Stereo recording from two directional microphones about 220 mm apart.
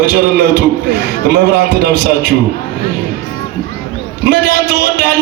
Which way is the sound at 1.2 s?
45° right (ahead or behind).